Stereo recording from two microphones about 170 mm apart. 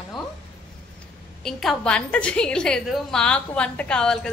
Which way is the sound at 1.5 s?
Centre (ahead or behind).